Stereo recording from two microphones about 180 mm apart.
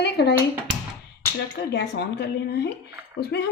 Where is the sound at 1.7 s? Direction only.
70° left (ahead or behind).